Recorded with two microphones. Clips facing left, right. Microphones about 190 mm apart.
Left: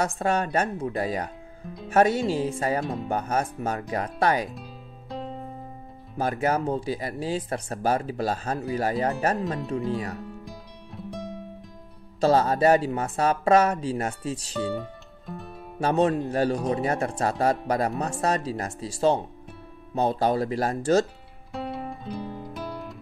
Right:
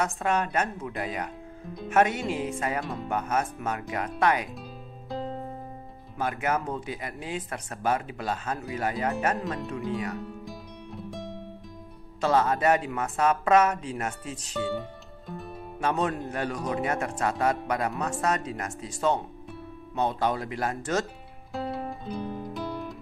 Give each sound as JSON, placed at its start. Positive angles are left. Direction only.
{"t": 0.0, "sound": "speech", "side_deg": 35}
{"t": 2.8, "sound": "speech", "side_deg": 0}
{"t": 3.1, "sound": "speech", "side_deg": 35}
{"t": 5.1, "sound": "music", "side_deg": 0}
{"t": 6.1, "sound": "speech", "side_deg": 35}
{"t": 10.4, "sound": "music", "side_deg": 0}
{"t": 12.2, "sound": "speech", "side_deg": 35}
{"t": 14.7, "sound": "music", "side_deg": 0}
{"t": 15.8, "sound": "speech", "side_deg": 35}
{"t": 21.5, "sound": "guitar", "side_deg": 0}
{"t": 22.5, "sound": "music", "side_deg": 0}